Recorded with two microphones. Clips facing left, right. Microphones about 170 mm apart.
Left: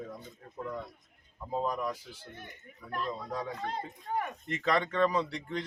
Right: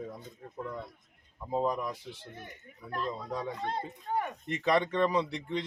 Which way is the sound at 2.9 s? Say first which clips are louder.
Right 1 dB; 25° right (ahead or behind).